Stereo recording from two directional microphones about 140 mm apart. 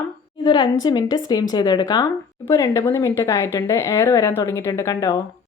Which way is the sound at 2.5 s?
20° left (ahead or behind).